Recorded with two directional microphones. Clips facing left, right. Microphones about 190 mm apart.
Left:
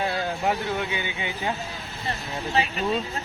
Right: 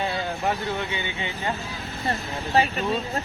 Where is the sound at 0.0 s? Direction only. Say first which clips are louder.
Left 1 dB; 5° left (ahead or behind).